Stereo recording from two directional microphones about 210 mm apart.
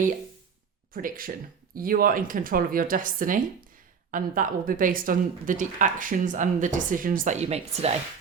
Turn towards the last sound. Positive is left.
turn(degrees=-30)  # may be behind; listen again after turning